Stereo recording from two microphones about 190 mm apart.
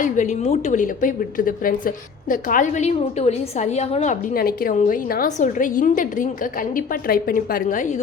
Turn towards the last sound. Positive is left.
turn(degrees=40)  # may be behind; listen again after turning